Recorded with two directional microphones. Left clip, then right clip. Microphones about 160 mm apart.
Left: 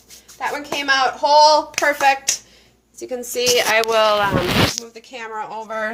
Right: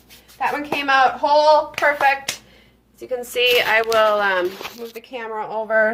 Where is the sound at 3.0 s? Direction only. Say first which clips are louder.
Right 2 dB; 40° left (ahead or behind).